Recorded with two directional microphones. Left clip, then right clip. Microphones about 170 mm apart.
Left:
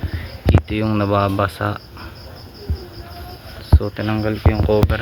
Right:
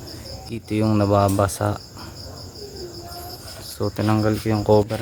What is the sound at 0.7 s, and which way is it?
Speech, 15° right (ahead or behind).